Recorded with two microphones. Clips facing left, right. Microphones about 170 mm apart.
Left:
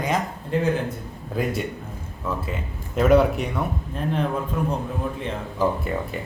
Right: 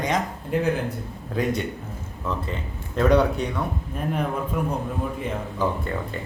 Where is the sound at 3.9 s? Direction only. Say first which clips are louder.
Left 1 dB; 10° right (ahead or behind).